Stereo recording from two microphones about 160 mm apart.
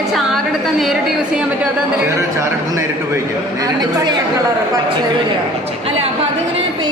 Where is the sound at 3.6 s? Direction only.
25° right (ahead or behind).